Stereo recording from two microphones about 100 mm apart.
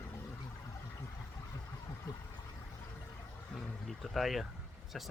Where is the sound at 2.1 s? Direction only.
40° left (ahead or behind).